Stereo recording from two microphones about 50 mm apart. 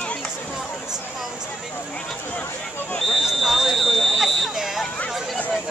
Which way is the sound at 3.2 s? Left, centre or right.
Centre.